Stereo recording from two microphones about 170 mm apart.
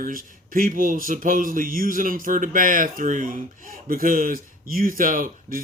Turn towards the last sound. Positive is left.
turn(degrees=-55)  # may be behind; listen again after turning